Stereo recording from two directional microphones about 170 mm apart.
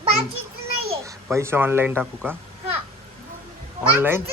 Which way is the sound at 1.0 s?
15° right (ahead or behind).